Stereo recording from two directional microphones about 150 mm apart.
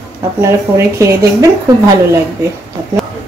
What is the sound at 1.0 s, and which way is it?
Speech, 20° right (ahead or behind).